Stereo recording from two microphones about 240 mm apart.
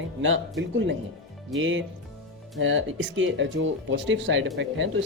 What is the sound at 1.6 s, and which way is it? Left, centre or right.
Speech, right.